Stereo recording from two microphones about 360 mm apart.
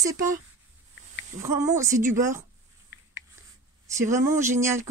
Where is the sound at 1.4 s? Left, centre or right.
Centre.